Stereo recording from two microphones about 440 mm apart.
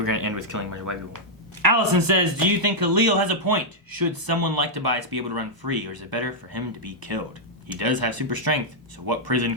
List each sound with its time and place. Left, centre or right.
0.0 s speech: right